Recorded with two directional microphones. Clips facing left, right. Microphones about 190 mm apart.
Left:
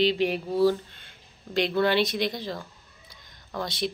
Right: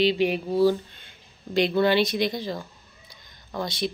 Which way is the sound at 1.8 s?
Centre (ahead or behind).